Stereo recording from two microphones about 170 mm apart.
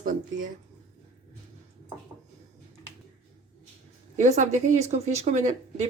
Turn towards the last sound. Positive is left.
turn(degrees=-45)  # may be behind; listen again after turning